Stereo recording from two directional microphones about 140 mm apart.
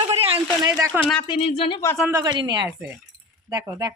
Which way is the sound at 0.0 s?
45° right (ahead or behind).